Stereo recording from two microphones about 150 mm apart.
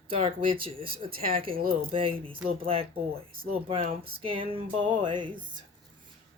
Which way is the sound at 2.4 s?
40° right (ahead or behind).